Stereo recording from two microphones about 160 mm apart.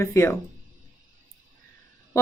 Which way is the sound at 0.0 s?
15° left (ahead or behind).